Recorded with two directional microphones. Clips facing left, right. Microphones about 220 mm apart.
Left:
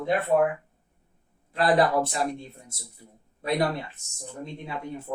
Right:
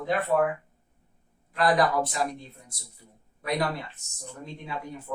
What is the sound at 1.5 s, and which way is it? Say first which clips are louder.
Speech: left 2 dB; 30° left (ahead or behind).